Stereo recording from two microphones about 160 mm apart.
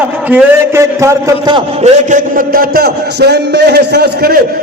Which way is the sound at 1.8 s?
50° right (ahead or behind).